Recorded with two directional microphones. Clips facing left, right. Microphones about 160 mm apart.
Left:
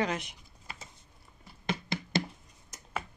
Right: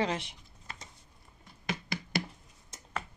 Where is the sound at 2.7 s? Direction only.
25° right (ahead or behind).